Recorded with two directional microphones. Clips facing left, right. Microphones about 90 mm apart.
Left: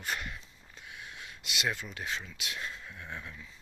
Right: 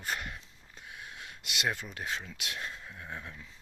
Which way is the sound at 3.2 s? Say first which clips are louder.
Even; 35° right (ahead or behind).